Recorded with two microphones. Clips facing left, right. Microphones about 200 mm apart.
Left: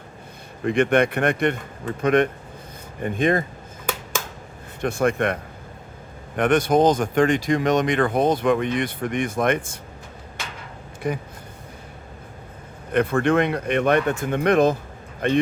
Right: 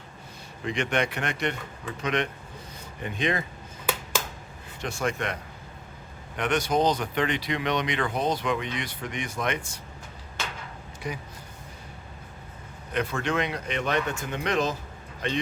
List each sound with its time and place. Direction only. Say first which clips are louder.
0.6 s speech: left 9 dB; 55° left (ahead or behind)
4.8 s speech: left 8 dB; 55° left (ahead or behind)
11.0 s speech: left 8 dB; 55° left (ahead or behind)
12.9 s speech: left 9 dB; 55° left (ahead or behind)